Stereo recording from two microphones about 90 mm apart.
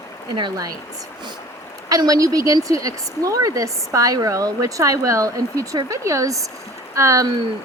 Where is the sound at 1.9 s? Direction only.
40° right (ahead or behind).